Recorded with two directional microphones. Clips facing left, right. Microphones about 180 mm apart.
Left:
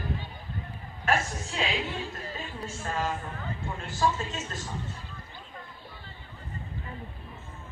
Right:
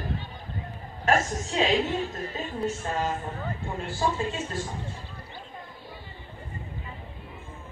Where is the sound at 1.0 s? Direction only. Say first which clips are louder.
Right 4 dB; 40° right (ahead or behind).